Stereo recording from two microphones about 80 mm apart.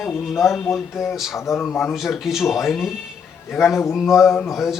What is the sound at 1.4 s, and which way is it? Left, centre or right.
Speech, left.